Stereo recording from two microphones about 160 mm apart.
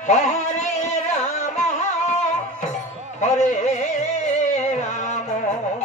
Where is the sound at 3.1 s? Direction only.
45° left (ahead or behind).